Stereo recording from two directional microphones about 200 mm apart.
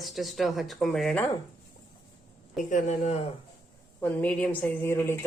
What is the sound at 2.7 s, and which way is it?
Speech, 35° left (ahead or behind).